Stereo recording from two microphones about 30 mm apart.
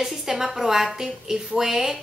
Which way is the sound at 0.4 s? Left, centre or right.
Centre.